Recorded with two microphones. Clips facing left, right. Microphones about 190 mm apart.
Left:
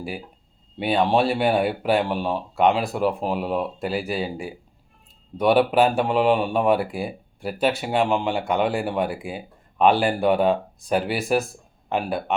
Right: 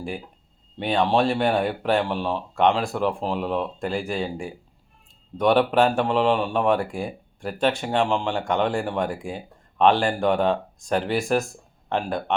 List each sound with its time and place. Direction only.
0.8 s speech: 10° left (ahead or behind)